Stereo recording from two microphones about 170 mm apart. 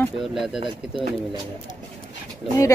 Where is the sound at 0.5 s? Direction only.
30° right (ahead or behind).